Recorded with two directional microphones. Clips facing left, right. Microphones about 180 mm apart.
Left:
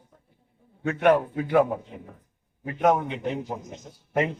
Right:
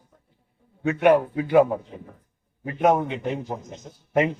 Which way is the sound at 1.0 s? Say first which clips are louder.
Right 2 dB; 10° right (ahead or behind).